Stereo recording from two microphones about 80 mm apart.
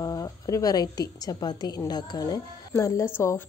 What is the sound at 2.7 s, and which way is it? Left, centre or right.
Speech, left.